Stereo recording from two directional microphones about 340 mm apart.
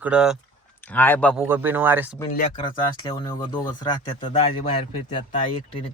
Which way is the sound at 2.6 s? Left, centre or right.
Centre.